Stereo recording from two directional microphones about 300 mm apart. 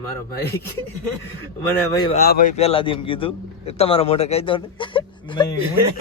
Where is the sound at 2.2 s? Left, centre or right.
Left.